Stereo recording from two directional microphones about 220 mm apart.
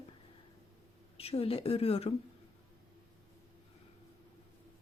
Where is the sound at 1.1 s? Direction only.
25° left (ahead or behind).